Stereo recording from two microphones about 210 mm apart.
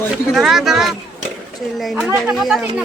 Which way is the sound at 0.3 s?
Centre (ahead or behind).